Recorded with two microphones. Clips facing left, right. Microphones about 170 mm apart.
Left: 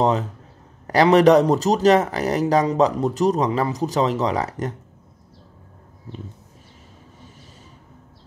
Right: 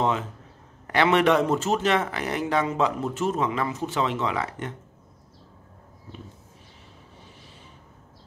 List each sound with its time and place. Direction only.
0.0 s speech: 40° left (ahead or behind)